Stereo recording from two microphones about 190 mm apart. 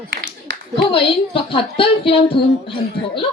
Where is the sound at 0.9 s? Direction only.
30° left (ahead or behind).